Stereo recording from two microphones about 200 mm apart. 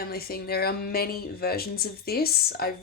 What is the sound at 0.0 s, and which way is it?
Speech, 50° left (ahead or behind).